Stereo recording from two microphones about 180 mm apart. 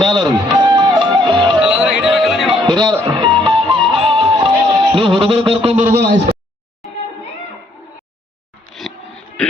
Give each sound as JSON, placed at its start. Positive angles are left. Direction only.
{"t": 0.0, "sound": "music", "side_deg": -25}
{"t": 1.5, "sound": "music", "side_deg": -5}
{"t": 2.5, "sound": "music", "side_deg": -25}
{"t": 8.8, "sound": "a sound", "side_deg": 0}